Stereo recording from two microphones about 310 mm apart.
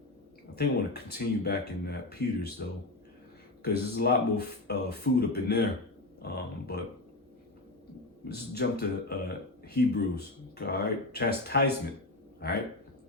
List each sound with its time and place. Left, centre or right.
0.5 s speech: left
8.3 s speech: left